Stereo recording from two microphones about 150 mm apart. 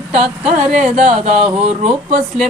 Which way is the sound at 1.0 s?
45° right (ahead or behind).